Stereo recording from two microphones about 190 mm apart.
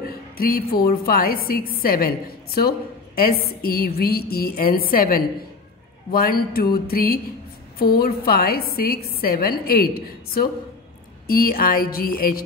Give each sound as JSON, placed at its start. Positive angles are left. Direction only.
{"t": 0.0, "sound": "a woman's voice", "side_deg": 50}